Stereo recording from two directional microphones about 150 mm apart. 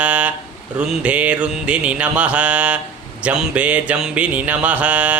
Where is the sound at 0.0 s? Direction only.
10° right (ahead or behind).